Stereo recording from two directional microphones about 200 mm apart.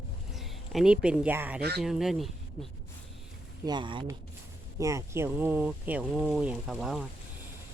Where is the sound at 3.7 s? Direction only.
25° right (ahead or behind); by 7.1 s centre (ahead or behind).